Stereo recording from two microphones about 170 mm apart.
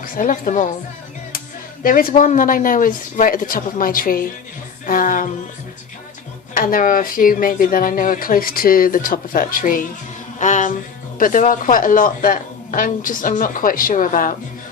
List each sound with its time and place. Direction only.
0.0 s a woman's voice: 50° left (ahead or behind)
1.8 s speech: 55° left (ahead or behind)
6.5 s speech: 55° left (ahead or behind)